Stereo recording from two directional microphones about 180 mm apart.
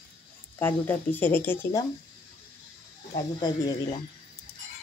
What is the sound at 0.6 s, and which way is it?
Speech, 10° left (ahead or behind).